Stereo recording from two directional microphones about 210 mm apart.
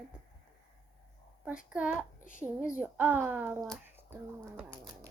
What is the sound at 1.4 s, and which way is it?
A child's voice, 5° right (ahead or behind).